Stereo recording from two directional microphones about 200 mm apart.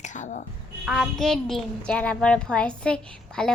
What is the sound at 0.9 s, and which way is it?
A woman's voice, centre (ahead or behind).